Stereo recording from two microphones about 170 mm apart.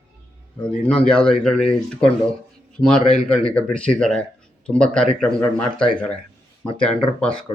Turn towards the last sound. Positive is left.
turn(degrees=5)  # may be behind; listen again after turning